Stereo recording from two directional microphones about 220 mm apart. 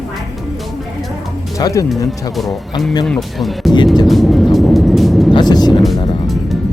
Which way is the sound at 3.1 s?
Centre (ahead or behind).